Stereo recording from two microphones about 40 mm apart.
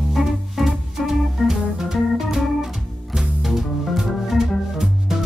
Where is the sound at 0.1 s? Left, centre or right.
Centre.